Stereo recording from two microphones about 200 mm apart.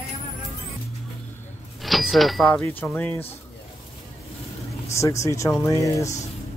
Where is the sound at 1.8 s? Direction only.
Centre (ahead or behind).